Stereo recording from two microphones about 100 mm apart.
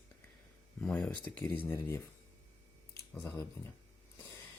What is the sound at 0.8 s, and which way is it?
Speech, 10° left (ahead or behind).